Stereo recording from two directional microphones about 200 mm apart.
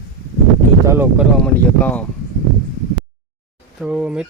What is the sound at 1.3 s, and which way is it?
Speech, 5° left (ahead or behind).